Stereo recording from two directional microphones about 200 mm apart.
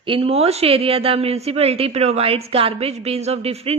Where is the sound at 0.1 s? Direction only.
30° right (ahead or behind).